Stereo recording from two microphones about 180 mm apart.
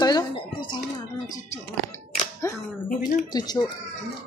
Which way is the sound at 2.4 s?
15° left (ahead or behind).